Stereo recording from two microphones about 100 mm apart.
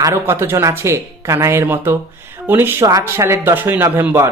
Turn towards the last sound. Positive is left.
turn(degrees=-25)  # may be behind; listen again after turning